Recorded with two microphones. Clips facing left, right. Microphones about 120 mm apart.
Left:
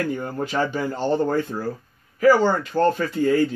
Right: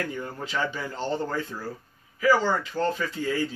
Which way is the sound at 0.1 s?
50° left (ahead or behind).